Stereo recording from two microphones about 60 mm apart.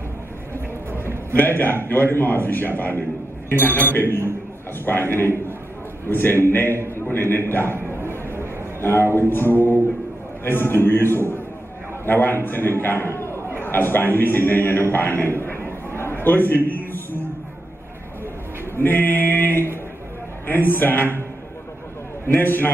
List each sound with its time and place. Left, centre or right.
1.0 s a man's voice: left
3.9 s music: left
8.8 s music: left
13.6 s a man's voice: left
18.8 s music: left
22.4 s music: left